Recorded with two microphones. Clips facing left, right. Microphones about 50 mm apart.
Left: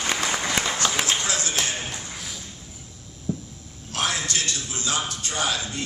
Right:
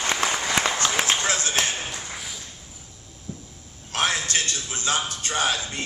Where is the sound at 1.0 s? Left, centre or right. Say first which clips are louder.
Right 2 dB; right.